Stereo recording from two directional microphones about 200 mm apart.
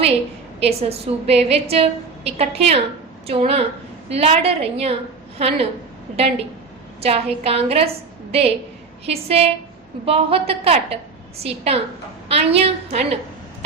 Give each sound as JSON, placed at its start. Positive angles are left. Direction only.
{"t": 0.6, "sound": "a woman's voice", "side_deg": -30}
{"t": 7.0, "sound": "a woman's voice", "side_deg": -30}